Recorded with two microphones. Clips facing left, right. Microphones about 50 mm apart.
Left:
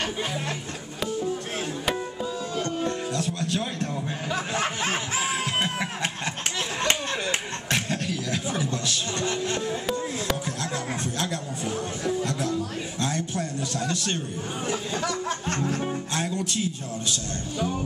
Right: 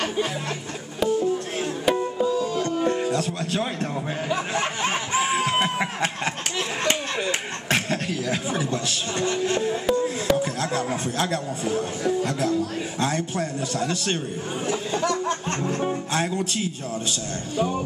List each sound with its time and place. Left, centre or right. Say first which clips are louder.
1.2 s music: right 4 dB; centre
2.1 s music: right 7 dB; centre
4.3 s snicker: right 1 dB; centre
5.4 s a sound: right 4 dB; right
10.3 s music: right 6 dB; centre
12.0 s a man's voice: right 2 dB; right
14.7 s a sound: right 4 dB; centre
15.6 s music: right 2 dB; centre
17.6 s a man's voice: right 4 dB; centre